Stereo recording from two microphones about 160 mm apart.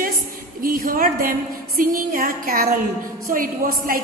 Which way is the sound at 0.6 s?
65° right (ahead or behind).